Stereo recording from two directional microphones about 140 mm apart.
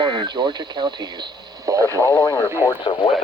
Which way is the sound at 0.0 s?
35° right (ahead or behind).